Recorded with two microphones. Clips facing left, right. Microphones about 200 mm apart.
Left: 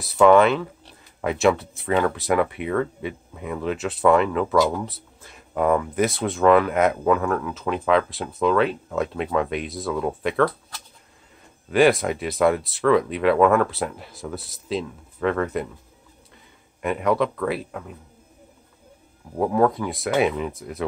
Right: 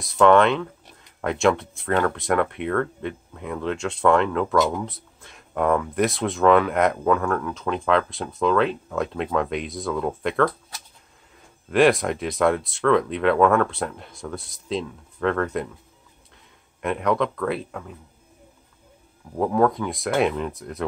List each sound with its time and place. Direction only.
0.0 s speech: 5° left (ahead or behind)
11.7 s speech: centre (ahead or behind)
16.8 s speech: centre (ahead or behind)
19.3 s speech: 5° left (ahead or behind)